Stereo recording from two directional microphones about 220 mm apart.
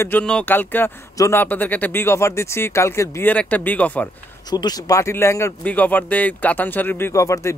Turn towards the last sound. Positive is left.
turn(degrees=15)  # may be behind; listen again after turning